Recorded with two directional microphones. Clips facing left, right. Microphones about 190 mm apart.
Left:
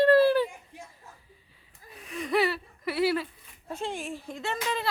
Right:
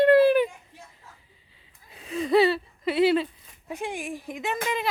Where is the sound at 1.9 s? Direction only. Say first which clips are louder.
Right 6 dB; 30° right (ahead or behind).